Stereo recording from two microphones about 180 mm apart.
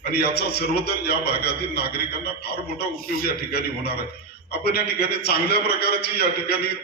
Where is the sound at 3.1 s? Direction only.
60° left (ahead or behind).